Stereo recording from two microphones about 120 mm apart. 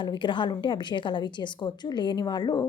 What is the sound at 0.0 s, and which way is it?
A woman's voice, 40° left (ahead or behind).